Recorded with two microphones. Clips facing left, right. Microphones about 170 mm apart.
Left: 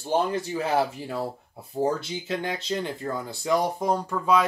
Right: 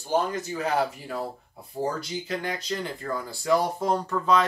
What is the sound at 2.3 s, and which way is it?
Speech, 25° left (ahead or behind).